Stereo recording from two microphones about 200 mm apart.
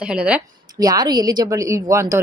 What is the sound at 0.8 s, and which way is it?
Speech, 20° right (ahead or behind).